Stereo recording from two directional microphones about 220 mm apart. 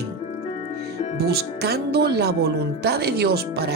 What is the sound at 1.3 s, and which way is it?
Speech, 45° right (ahead or behind).